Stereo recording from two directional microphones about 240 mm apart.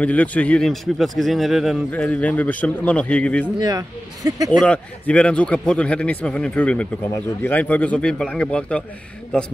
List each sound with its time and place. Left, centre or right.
0.0 s speech: centre
3.5 s speech: centre
4.5 s speech: centre